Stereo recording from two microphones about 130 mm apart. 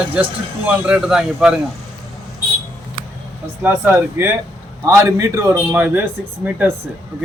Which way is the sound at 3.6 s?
15° right (ahead or behind).